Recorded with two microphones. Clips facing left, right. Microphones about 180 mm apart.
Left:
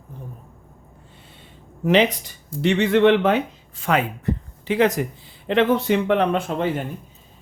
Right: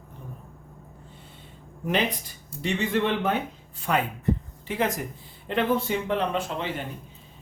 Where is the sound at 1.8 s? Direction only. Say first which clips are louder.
Left 8 dB; 90° left; by 6.7 s 60° left (ahead or behind).